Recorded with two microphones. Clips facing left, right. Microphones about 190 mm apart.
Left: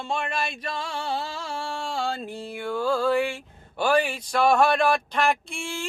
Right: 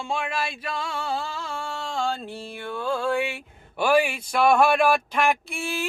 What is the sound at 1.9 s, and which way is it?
Music, 15° left (ahead or behind).